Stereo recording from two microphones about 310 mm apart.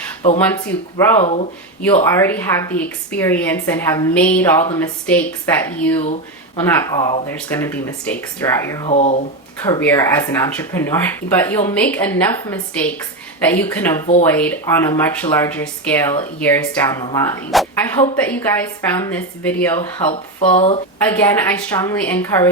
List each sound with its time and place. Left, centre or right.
0.3 s a woman's voice: centre
1.2 s speech: centre
2.0 s a woman's voice: centre
8.9 s speech: left
9.6 s a woman's voice: centre
20.6 s speech: centre
21.0 s a woman's voice: centre